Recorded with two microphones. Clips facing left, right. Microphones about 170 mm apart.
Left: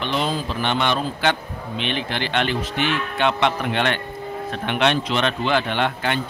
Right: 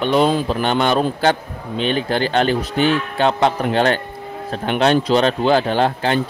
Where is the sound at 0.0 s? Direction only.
45° right (ahead or behind).